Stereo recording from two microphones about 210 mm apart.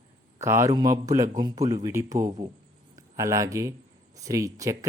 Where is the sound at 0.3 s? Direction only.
15° right (ahead or behind).